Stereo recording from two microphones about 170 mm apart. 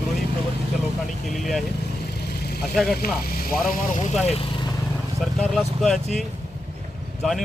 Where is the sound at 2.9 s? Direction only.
60° left (ahead or behind).